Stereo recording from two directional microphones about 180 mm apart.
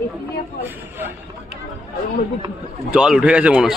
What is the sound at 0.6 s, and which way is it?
Vehicle, 10° right (ahead or behind).